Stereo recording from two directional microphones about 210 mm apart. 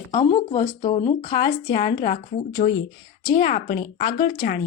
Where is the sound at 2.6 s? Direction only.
35° left (ahead or behind).